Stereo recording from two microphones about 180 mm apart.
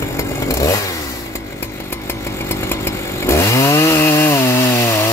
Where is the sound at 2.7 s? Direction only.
15° left (ahead or behind).